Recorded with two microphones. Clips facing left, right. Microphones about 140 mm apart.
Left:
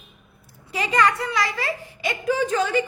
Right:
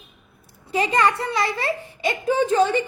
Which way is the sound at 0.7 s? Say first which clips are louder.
Right 1 dB; 25° right (ahead or behind).